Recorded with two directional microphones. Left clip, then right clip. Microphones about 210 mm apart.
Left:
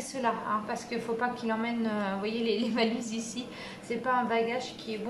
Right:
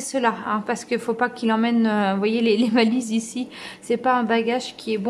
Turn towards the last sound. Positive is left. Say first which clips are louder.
# right 10 dB
turn(degrees=-40)  # may be behind; listen again after turning